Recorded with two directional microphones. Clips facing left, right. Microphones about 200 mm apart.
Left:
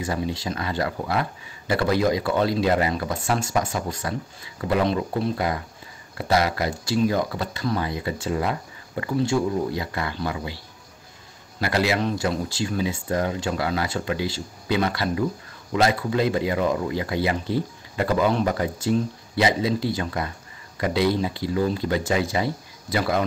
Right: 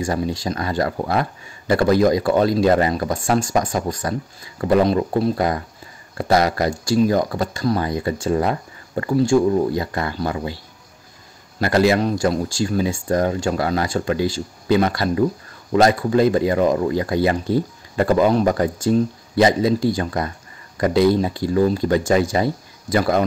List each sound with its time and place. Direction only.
0.0 s speech: 45° right (ahead or behind)
11.6 s speech: 45° right (ahead or behind)